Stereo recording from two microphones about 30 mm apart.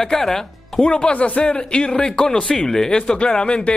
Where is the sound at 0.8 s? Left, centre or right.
Left.